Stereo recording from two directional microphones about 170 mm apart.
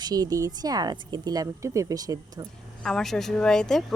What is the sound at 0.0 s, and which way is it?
Speech, 20° right (ahead or behind).